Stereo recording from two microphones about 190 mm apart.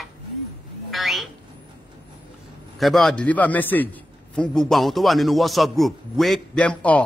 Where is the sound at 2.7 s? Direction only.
Centre (ahead or behind).